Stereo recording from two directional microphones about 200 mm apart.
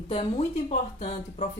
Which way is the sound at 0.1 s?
30° left (ahead or behind).